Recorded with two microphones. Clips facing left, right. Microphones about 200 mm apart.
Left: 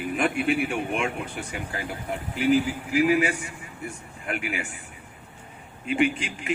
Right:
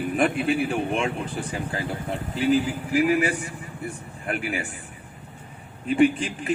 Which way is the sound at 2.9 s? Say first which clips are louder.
Even; 35° right (ahead or behind).